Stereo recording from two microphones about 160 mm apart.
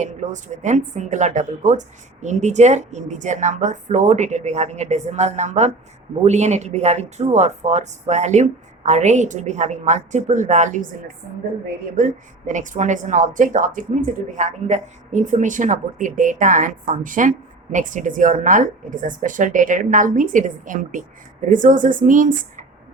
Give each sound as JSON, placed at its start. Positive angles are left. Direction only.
{"t": 0.0, "sound": "a woman's voice", "side_deg": -50}
{"t": 11.9, "sound": "a woman's voice", "side_deg": -55}